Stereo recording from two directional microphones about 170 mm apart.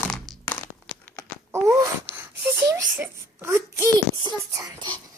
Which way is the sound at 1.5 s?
15° right (ahead or behind).